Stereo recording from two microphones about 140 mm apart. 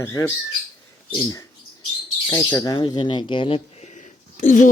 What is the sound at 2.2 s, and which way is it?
Speech, 25° left (ahead or behind).